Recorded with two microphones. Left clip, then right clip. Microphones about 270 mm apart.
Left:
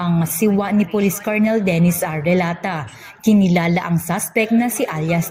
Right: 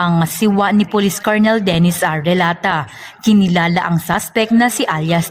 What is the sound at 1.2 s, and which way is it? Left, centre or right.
Speech, right.